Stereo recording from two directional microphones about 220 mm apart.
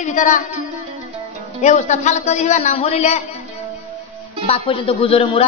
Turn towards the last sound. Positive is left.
turn(degrees=25)  # may be behind; listen again after turning